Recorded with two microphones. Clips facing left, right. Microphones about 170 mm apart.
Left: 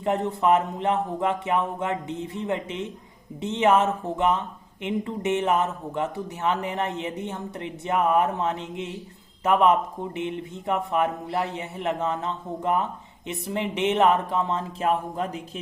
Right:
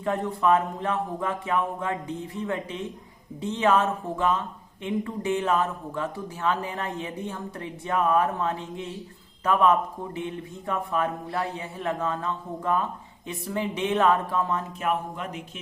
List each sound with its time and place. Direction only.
0.0 s speech: 20° left (ahead or behind)